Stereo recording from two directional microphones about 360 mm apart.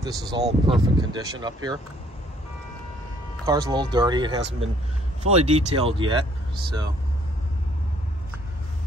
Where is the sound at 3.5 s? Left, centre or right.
Centre.